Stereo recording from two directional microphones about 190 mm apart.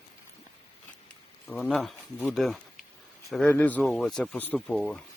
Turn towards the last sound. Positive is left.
turn(degrees=5)  # may be behind; listen again after turning